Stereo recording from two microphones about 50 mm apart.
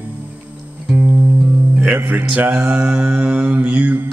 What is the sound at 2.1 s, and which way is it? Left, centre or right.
Mantra, right.